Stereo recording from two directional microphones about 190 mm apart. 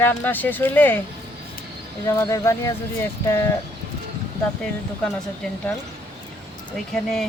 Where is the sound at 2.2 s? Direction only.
15° left (ahead or behind).